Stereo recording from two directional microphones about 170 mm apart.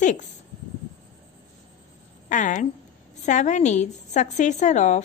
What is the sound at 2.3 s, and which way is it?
A woman's voice, 45° left (ahead or behind).